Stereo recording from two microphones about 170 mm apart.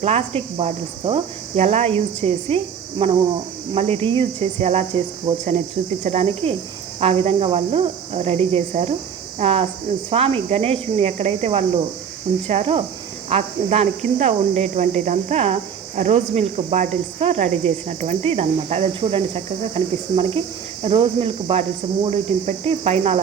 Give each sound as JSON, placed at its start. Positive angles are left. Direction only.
{"t": 0.0, "sound": "cricket", "side_deg": -35}
{"t": 6.0, "sound": "cricket", "side_deg": -40}